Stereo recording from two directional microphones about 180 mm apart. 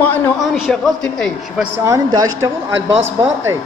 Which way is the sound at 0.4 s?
Centre (ahead or behind).